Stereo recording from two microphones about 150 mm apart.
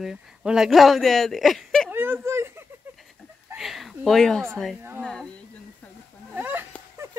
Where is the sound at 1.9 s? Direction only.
15° right (ahead or behind).